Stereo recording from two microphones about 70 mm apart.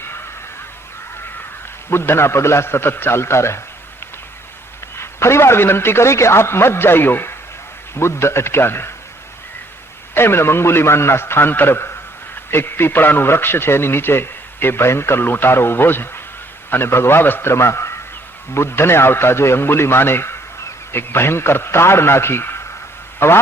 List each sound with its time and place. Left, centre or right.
1.9 s a man's voice: left
4.9 s a man's voice: left
10.2 s a man's voice: left